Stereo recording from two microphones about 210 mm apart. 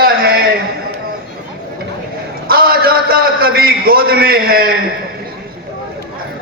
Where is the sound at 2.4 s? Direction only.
45° right (ahead or behind).